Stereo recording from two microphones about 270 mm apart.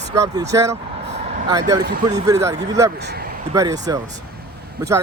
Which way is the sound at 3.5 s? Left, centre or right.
Centre.